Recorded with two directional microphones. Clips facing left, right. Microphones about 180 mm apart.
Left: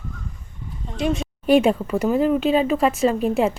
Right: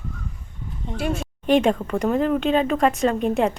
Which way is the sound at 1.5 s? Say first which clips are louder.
Left 2 dB; 10° left (ahead or behind).